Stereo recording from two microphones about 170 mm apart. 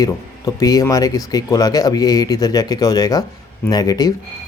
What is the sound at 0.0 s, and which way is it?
A man's voice, 20° left (ahead or behind).